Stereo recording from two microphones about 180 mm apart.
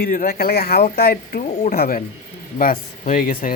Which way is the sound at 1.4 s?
40° left (ahead or behind).